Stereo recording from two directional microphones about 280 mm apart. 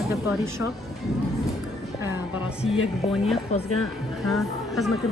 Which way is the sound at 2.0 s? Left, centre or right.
Centre.